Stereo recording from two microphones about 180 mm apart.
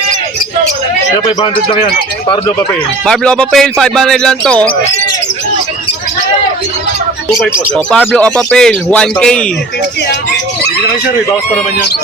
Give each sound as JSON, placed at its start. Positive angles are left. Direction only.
{"t": 2.2, "sound": "speech", "side_deg": 25}
{"t": 3.1, "sound": "speech", "side_deg": 5}
{"t": 7.9, "sound": "speech", "side_deg": 5}